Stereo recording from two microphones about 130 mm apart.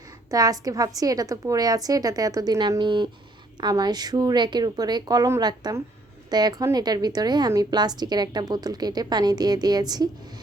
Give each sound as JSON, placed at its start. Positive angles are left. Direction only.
{"t": 0.3, "sound": "a woman's voice", "side_deg": -30}